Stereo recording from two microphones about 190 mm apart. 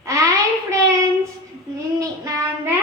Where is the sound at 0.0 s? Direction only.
15° right (ahead or behind).